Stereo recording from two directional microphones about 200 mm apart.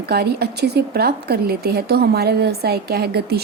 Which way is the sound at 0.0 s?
50° right (ahead or behind).